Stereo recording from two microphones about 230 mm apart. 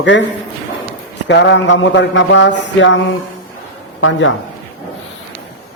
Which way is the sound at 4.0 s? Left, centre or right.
Left.